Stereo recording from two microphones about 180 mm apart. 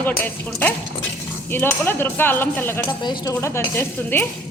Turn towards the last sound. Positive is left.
turn(degrees=10)  # may be behind; listen again after turning